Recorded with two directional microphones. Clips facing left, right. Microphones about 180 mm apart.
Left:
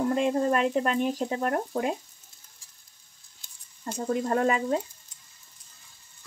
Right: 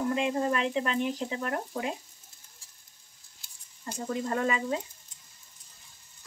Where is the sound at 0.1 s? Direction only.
45° left (ahead or behind).